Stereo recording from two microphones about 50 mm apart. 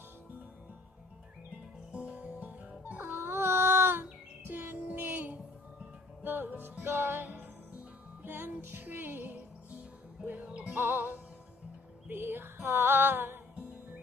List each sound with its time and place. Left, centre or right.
1.9 s music: right
10.2 s music: right
10.7 s music: right
12.6 s female singing: right